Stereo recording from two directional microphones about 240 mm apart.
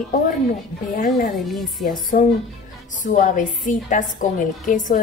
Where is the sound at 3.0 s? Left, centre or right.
Left.